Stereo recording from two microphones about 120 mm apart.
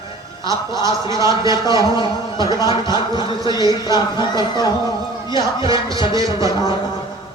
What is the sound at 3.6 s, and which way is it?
Speech, 35° left (ahead or behind).